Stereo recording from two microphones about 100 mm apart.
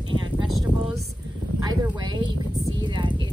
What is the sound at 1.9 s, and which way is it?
Speech, 45° right (ahead or behind).